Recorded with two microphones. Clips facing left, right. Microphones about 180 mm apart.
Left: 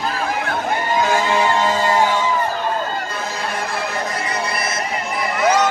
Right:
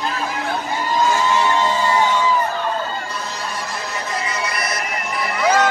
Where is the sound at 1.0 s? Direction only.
55° left (ahead or behind).